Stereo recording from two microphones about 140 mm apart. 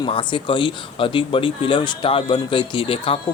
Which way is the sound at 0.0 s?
35° left (ahead or behind).